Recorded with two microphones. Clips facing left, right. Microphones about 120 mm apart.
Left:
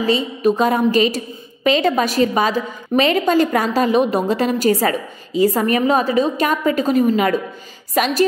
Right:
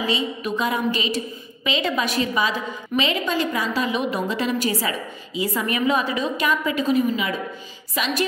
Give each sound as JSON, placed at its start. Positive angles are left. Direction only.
{"t": 0.0, "sound": "a woman's voice", "side_deg": 40}